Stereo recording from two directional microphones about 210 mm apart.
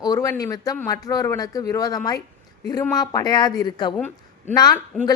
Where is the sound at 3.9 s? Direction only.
10° left (ahead or behind).